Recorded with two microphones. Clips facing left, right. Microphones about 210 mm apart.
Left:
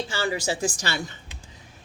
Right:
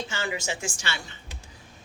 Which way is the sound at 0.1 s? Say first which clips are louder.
Left 5 dB; 35° left (ahead or behind).